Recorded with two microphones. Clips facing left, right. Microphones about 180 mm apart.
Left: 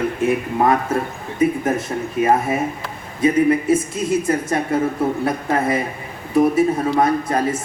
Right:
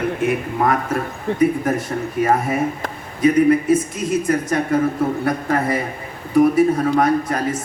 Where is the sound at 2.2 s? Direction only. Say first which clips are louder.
Left 1 dB; 25° left (ahead or behind).